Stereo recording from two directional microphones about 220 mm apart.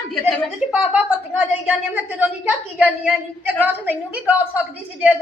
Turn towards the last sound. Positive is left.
turn(degrees=-5)  # may be behind; listen again after turning